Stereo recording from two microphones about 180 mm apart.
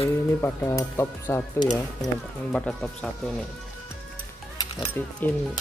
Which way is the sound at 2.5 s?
5° left (ahead or behind).